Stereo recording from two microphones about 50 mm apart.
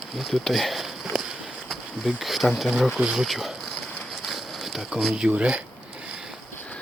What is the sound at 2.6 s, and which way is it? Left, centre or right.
Speech, centre.